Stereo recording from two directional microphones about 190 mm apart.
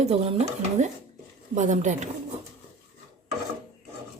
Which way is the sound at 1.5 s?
40° right (ahead or behind).